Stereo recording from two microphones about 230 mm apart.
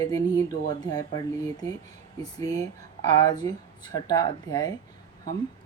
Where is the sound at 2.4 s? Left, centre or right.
Centre.